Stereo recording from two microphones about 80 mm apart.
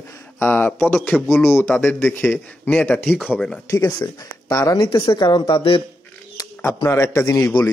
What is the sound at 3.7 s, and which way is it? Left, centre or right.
Speech, left.